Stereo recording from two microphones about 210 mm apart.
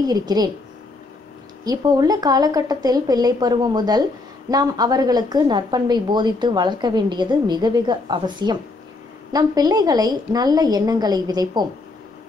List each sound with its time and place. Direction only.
0.0 s a woman's voice: 20° right (ahead or behind)
1.6 s a woman's voice: 20° right (ahead or behind)